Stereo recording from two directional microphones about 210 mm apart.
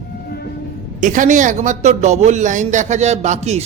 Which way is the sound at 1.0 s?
35° right (ahead or behind).